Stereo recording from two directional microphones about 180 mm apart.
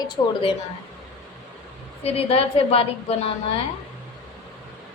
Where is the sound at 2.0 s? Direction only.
35° left (ahead or behind).